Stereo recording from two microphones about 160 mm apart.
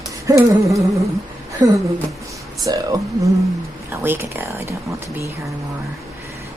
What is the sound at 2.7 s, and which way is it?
Speech, 25° right (ahead or behind).